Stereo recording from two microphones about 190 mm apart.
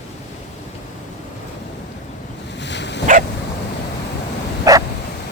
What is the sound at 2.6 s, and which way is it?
Dog, 65° left (ahead or behind).